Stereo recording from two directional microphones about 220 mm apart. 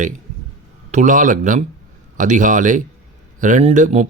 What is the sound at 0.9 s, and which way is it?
Speech, 35° right (ahead or behind).